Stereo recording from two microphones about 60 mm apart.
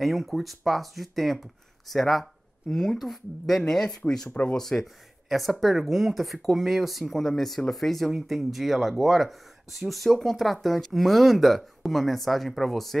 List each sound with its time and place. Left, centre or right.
0.0 s speech: centre
4.3 s speech: left
4.6 s speech: centre